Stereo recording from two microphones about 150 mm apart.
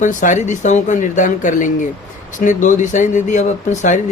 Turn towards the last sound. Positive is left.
turn(degrees=50)  # may be behind; listen again after turning